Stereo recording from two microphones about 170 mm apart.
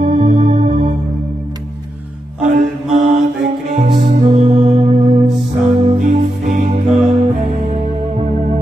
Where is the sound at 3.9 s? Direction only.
35° right (ahead or behind).